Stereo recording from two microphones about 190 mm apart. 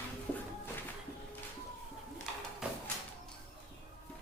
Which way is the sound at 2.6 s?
5° right (ahead or behind).